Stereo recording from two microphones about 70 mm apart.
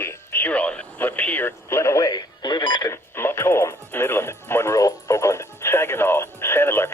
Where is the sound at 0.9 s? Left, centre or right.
Left.